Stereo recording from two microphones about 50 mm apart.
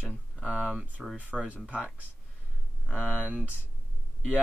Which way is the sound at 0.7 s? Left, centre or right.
Centre.